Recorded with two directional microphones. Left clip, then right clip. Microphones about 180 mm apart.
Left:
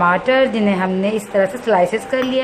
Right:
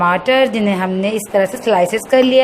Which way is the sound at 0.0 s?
25° right (ahead or behind).